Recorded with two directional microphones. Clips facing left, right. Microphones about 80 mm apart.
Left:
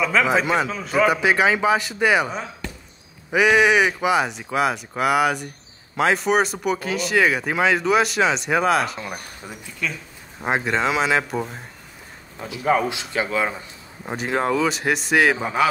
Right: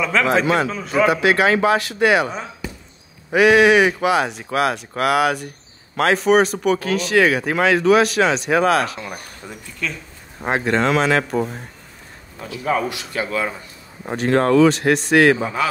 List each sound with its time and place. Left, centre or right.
0.0 s speech: centre
12.4 s speech: centre
14.0 s speech: centre